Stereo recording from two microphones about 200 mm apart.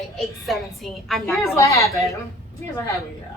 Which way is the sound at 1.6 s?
15° left (ahead or behind).